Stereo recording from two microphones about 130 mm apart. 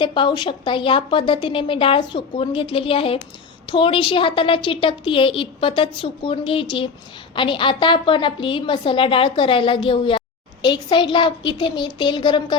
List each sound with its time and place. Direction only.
0.0 s a woman's voice: 40° left (ahead or behind)